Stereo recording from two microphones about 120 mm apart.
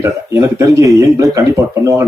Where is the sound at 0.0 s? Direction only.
25° right (ahead or behind).